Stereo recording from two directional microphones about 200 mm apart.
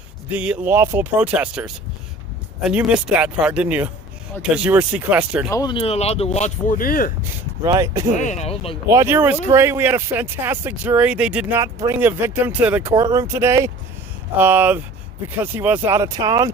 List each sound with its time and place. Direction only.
0.3 s speech: 5° right (ahead or behind)
5.5 s speech: 20° left (ahead or behind); by 7.1 s 45° left (ahead or behind)
7.6 s speech: 15° right (ahead or behind)
8.1 s speech: 35° left (ahead or behind)
8.9 s speech: 15° right (ahead or behind)